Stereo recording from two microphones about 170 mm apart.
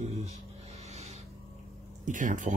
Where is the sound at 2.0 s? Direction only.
50° right (ahead or behind).